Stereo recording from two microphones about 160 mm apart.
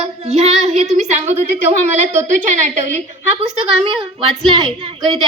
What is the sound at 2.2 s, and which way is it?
Speech, 50° right (ahead or behind).